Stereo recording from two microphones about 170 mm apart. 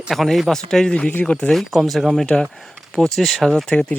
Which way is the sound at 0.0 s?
Centre (ahead or behind).